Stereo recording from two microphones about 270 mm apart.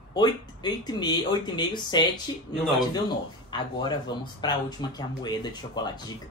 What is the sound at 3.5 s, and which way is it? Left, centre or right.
Speech, centre.